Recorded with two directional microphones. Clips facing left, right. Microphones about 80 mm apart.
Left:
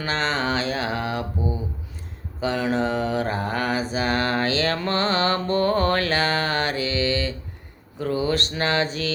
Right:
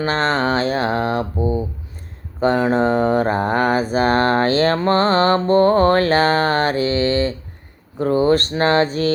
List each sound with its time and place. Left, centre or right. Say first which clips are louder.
0.0 s mantra: right 6 dB; right